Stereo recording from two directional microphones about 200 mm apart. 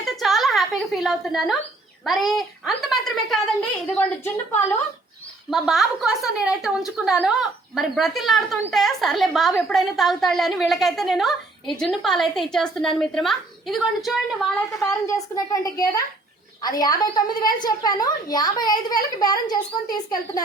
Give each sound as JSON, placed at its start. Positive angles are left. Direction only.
{"t": 0.0, "sound": "a sound", "side_deg": 0}
{"t": 2.0, "sound": "a woman's voice", "side_deg": 0}
{"t": 14.8, "sound": "a woman's voice", "side_deg": 15}